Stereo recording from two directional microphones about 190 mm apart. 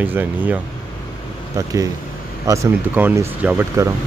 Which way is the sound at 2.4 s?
15° right (ahead or behind).